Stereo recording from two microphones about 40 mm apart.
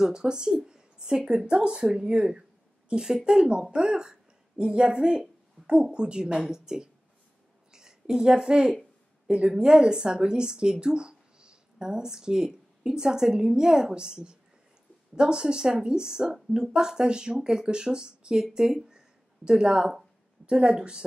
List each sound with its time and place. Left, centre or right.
0.0 s a woman's voice: centre
18.9 s a sound: centre
20.4 s speech: right